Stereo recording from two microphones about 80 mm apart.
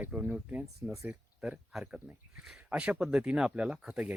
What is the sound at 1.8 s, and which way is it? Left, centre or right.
Speech, right.